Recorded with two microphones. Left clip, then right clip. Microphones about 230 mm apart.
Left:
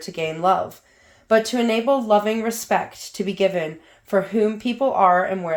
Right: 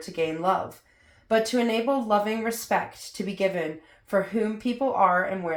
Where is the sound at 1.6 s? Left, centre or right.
Left.